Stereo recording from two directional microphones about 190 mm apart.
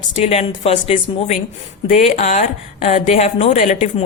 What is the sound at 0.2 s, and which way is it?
A woman's voice, 30° left (ahead or behind).